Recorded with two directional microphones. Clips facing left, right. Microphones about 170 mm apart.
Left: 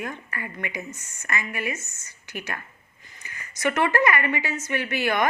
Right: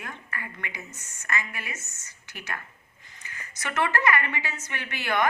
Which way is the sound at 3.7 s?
15° left (ahead or behind).